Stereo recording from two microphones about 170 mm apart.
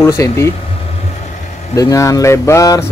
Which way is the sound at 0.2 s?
20° left (ahead or behind).